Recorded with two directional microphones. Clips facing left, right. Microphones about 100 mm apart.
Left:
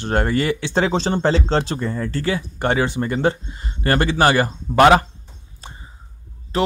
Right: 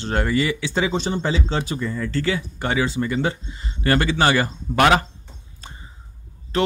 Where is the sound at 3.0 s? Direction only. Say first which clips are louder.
Left 3 dB; 45° left (ahead or behind); by 5.0 s 30° left (ahead or behind).